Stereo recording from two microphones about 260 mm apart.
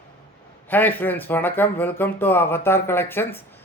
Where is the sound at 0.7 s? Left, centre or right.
Centre.